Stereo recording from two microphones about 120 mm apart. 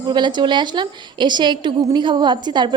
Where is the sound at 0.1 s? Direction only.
40° right (ahead or behind).